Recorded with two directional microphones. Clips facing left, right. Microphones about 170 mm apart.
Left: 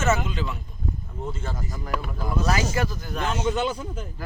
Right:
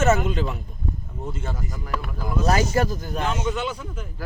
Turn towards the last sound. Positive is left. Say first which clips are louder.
# left 2 dB
turn(degrees=40)  # may be behind; listen again after turning